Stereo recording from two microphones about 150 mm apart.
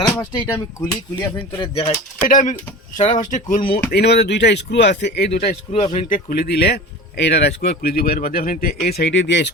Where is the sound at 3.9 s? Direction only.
90° left.